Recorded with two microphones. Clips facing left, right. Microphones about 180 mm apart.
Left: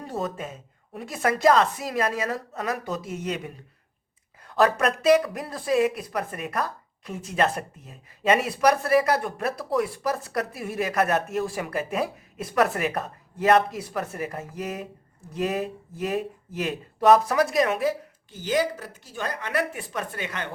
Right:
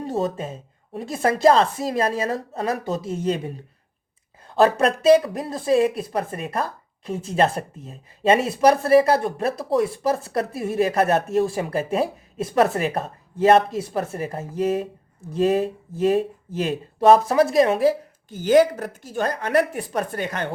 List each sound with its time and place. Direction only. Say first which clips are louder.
0.0 s speech: right 6 dB; 25° right (ahead or behind)
18.3 s speech: right 9 dB; 50° right (ahead or behind)